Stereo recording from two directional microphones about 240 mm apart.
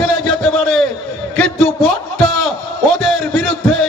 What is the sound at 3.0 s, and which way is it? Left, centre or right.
Music, centre.